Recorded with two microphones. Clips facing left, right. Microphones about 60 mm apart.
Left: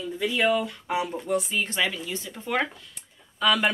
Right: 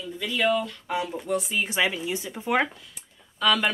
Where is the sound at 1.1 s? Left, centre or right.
Centre.